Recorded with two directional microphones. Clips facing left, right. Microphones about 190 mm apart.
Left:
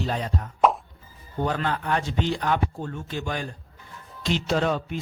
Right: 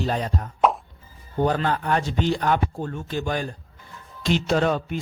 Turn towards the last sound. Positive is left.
turn(degrees=-50)  # may be behind; listen again after turning